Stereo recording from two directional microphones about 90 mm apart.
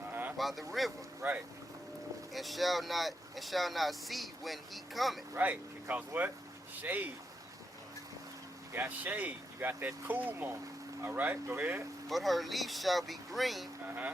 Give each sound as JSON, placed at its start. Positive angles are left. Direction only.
{"t": 0.1, "sound": "a sound", "side_deg": -20}
{"t": 0.3, "sound": "speech", "side_deg": 0}
{"t": 1.2, "sound": "speech", "side_deg": -25}
{"t": 2.3, "sound": "speech", "side_deg": 0}
{"t": 5.3, "sound": "speech", "side_deg": -20}
{"t": 8.7, "sound": "speech", "side_deg": -20}
{"t": 12.0, "sound": "speech", "side_deg": 0}
{"t": 13.8, "sound": "speech", "side_deg": -20}